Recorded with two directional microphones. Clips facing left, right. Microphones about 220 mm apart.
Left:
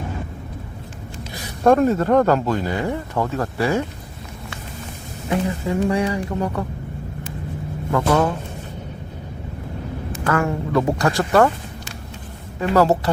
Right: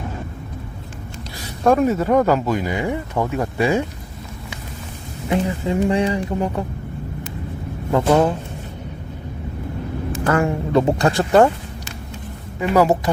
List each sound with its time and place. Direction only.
1.6 s speech: 5° right (ahead or behind)
5.3 s speech: 20° right (ahead or behind)
7.9 s speech: 20° right (ahead or behind)
10.2 s speech: 25° right (ahead or behind)
12.5 s speech: 15° right (ahead or behind)